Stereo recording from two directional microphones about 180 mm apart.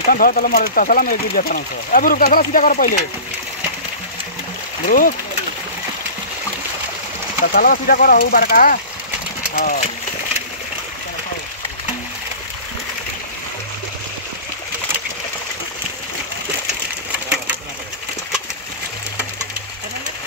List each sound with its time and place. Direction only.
0.1 s speech: 50° left (ahead or behind)
4.8 s speech: 50° left (ahead or behind)
7.5 s speech: 55° left (ahead or behind)